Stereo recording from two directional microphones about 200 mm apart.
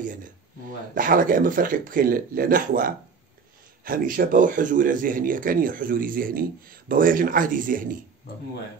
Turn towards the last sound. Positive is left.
turn(degrees=-45)  # may be behind; listen again after turning